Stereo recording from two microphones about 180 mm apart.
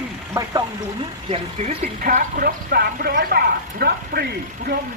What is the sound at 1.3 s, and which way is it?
Speech, 35° right (ahead or behind).